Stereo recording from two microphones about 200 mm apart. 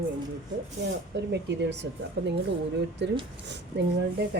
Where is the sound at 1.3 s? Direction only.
60° right (ahead or behind).